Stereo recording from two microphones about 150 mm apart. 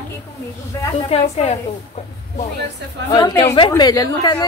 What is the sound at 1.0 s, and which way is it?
Speech, 45° left (ahead or behind).